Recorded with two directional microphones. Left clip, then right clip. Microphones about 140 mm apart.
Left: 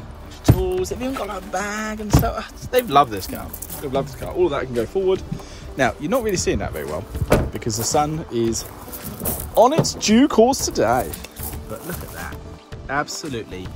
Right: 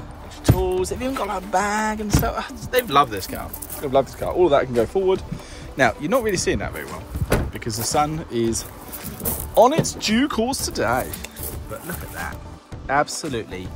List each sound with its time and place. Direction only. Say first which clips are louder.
0.6 s speech: even; 20° left (ahead or behind)
2.7 s speech: left 2 dB; 30° left (ahead or behind); by 5.0 s 10° left (ahead or behind)
5.8 s speech: right 1 dB; 20° left (ahead or behind)
9.9 s speech: left 6 dB; 55° left (ahead or behind); by 11.1 s 35° left (ahead or behind)
12.8 s speech: right 3 dB; 15° left (ahead or behind)